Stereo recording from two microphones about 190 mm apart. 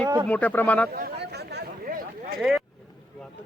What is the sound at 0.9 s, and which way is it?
Chatter, 55° right (ahead or behind).